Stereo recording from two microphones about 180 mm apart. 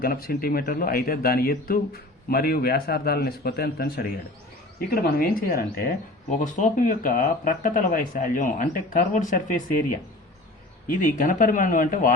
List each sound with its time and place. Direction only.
0.0 s speech: 55° left (ahead or behind)
10.9 s speech: 45° left (ahead or behind)